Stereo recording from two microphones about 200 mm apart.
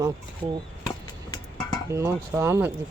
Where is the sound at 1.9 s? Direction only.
15° right (ahead or behind).